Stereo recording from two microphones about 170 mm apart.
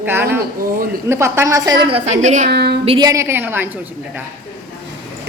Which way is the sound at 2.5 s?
70° right (ahead or behind).